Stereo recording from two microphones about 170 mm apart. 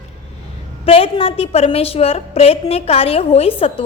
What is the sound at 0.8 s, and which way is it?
A woman's voice, 35° left (ahead or behind).